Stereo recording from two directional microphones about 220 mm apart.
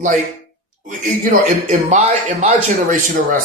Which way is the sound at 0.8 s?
35° right (ahead or behind).